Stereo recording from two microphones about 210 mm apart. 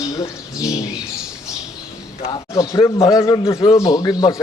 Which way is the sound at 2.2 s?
20° left (ahead or behind).